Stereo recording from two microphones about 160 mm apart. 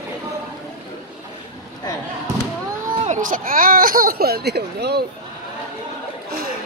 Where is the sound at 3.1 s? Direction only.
55° right (ahead or behind); by 5.0 s 90° right.